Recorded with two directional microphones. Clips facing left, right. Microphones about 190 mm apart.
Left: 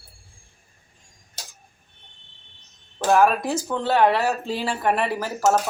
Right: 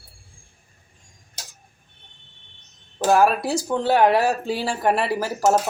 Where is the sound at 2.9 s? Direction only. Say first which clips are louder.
Right 1 dB; 20° right (ahead or behind).